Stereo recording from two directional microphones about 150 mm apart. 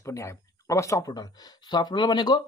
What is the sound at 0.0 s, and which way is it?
Speech, 20° left (ahead or behind).